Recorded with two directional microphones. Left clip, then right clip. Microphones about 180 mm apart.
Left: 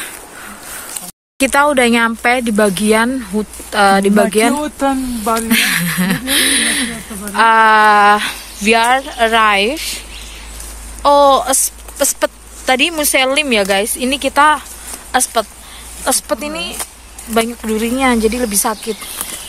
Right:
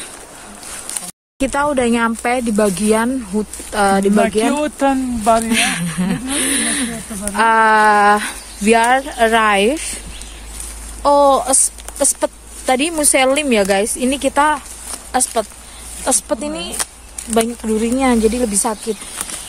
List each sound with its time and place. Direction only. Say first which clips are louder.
1.4 s speech: left 5 dB; 5° left (ahead or behind)
4.6 s speech: even; 20° right (ahead or behind)
5.3 s speech: left 1 dB; centre (ahead or behind); by 9.8 s 35° right (ahead or behind)
11.0 s speech: left 2 dB; 15° right (ahead or behind)